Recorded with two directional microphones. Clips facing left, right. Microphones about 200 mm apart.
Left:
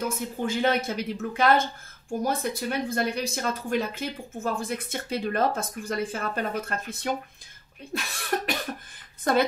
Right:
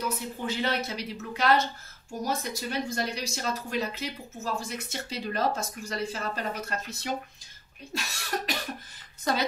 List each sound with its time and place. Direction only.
0.0 s speech: 50° left (ahead or behind)
7.9 s cough: 55° left (ahead or behind)
9.3 s speech: 50° left (ahead or behind)